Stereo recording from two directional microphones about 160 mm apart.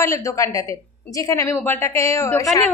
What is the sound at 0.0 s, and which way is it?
A woman's voice, 20° left (ahead or behind).